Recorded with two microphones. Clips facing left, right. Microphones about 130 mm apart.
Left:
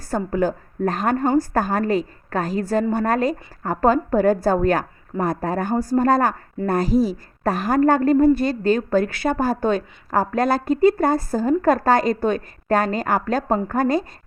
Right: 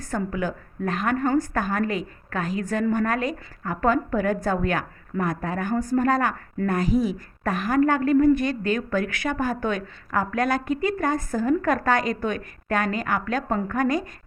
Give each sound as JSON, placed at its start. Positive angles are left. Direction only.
{"t": 0.0, "sound": "a woman's voice", "side_deg": 35}